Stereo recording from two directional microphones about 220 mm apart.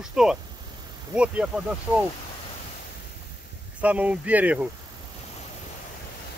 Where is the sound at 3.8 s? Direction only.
5° right (ahead or behind).